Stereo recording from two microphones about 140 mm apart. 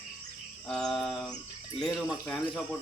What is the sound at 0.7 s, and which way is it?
Speech, 5° left (ahead or behind).